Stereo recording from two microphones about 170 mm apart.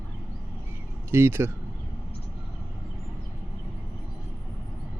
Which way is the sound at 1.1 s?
15° right (ahead or behind).